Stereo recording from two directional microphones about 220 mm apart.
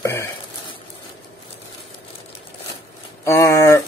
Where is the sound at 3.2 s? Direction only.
15° left (ahead or behind).